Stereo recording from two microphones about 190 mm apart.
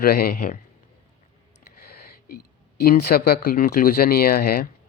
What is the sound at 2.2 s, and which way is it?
Speech, 55° left (ahead or behind).